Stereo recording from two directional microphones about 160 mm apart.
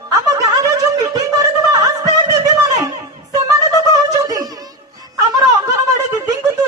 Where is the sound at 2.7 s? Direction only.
20° right (ahead or behind).